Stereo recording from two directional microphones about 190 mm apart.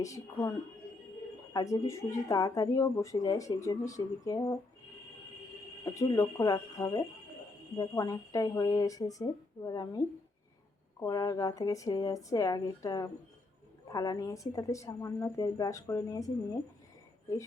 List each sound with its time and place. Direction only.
0.0 s speech: 15° left (ahead or behind)
1.5 s speech: 15° left (ahead or behind)
5.8 s speech: 15° left (ahead or behind)
11.0 s speech: 20° left (ahead or behind)